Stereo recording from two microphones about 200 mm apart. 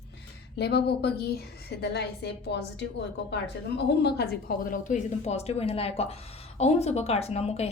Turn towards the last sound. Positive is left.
turn(degrees=30)  # may be behind; listen again after turning